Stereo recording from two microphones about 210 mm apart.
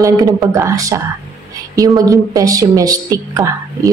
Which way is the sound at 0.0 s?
15° right (ahead or behind).